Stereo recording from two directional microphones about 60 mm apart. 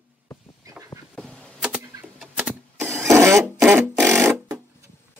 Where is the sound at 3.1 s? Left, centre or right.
Right.